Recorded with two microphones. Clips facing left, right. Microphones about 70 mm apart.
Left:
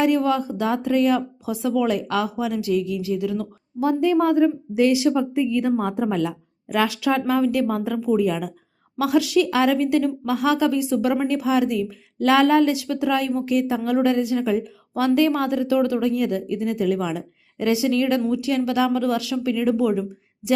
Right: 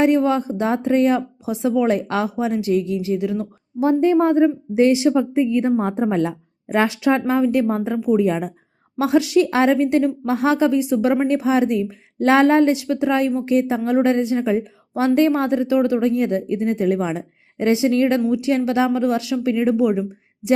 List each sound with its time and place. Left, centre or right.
0.0 s a woman's voice: right
8.2 s a woman's voice: right